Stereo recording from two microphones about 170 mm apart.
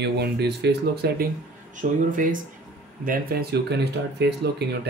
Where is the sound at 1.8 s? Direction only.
50° right (ahead or behind); by 4.6 s 75° right (ahead or behind).